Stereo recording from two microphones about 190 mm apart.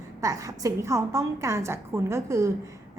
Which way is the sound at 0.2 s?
15° right (ahead or behind).